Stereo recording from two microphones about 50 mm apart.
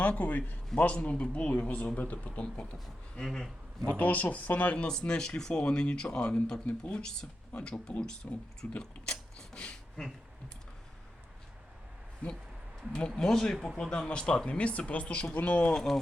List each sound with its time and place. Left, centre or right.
0.0 s speech: left
3.2 s speech: centre
3.9 s speech: left
4.9 s speech: centre
8.8 s a sound: centre
10.0 s speech: centre
12.9 s speech: centre
14.1 s speech: centre
15.7 s speech: centre